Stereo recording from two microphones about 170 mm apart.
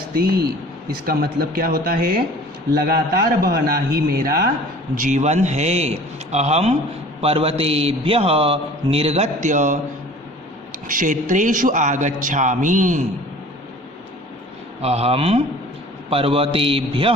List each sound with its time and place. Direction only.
0.1 s a man's voice: 60° right (ahead or behind)
4.9 s a man's voice: 45° right (ahead or behind)
10.8 s a man's voice: 50° right (ahead or behind)
14.8 s a man's voice: 35° right (ahead or behind)